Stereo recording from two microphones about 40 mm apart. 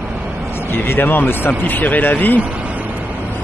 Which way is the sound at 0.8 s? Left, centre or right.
Left.